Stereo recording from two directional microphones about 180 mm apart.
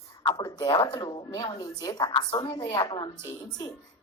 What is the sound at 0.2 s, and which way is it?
A woman's voice, 20° left (ahead or behind).